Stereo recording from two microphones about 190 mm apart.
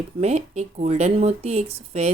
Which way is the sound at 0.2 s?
35° right (ahead or behind).